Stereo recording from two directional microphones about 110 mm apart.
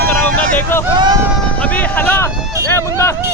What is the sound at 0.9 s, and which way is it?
Speech, 40° right (ahead or behind).